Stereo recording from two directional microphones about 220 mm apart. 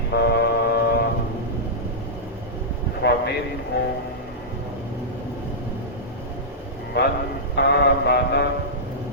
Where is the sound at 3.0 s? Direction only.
50° left (ahead or behind).